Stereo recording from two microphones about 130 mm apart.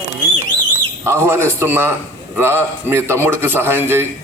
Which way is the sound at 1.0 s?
20° right (ahead or behind).